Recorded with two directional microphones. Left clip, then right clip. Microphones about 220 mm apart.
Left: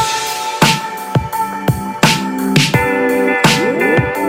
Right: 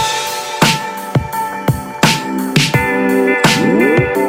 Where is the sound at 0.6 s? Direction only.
Centre (ahead or behind).